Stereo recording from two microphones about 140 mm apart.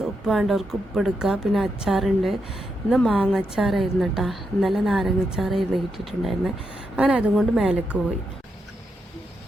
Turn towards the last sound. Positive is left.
turn(degrees=-10)  # may be behind; listen again after turning